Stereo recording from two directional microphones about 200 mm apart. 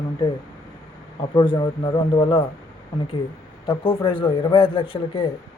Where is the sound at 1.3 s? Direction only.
20° left (ahead or behind).